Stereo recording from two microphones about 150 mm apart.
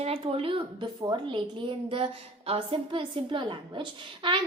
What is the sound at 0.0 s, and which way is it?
A woman's voice, 40° right (ahead or behind).